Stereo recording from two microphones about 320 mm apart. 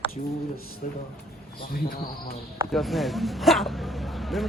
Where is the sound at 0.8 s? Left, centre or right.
Left.